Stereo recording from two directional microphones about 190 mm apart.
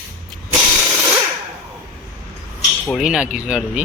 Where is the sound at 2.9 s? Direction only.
5° right (ahead or behind).